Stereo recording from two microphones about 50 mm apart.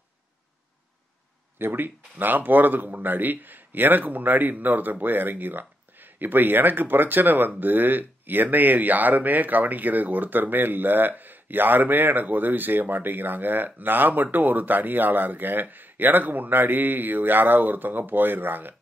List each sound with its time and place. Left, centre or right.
1.6 s speech: right